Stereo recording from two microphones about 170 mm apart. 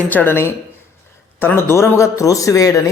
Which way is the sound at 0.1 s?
10° left (ahead or behind).